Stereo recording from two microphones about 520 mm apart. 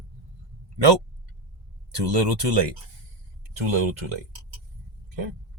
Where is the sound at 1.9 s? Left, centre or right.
Right.